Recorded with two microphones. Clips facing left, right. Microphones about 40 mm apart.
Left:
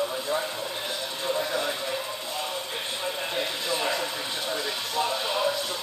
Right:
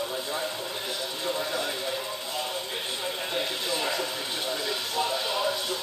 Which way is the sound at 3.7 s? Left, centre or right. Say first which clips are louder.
Left 2 dB; left.